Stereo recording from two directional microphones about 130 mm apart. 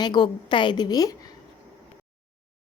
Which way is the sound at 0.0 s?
35° left (ahead or behind).